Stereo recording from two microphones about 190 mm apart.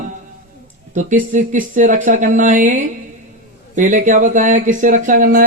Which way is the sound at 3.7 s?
40° right (ahead or behind).